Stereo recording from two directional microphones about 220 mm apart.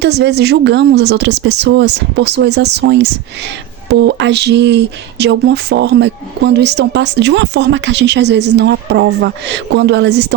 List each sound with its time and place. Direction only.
0.0 s speech: 50° right (ahead or behind)